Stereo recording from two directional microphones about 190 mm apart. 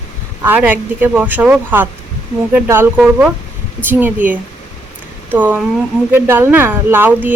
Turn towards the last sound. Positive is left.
turn(degrees=-10)  # may be behind; listen again after turning